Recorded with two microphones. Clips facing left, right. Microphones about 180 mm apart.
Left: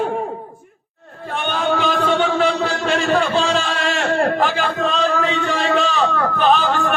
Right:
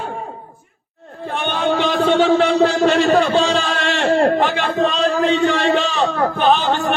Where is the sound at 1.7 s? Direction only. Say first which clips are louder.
Right 3 dB; 35° right (ahead or behind).